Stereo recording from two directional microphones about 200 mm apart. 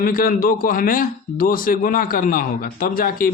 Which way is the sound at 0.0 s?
45° left (ahead or behind).